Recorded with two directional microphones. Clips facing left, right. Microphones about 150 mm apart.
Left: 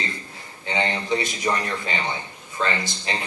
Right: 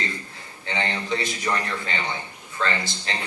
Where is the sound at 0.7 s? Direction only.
20° left (ahead or behind).